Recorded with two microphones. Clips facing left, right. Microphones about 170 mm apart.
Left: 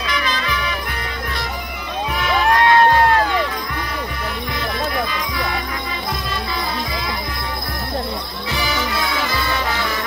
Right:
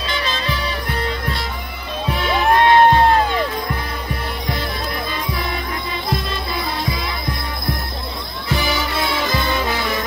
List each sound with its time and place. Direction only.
0.1 s music: 30° right (ahead or behind)
2.1 s music: 30° right (ahead or behind)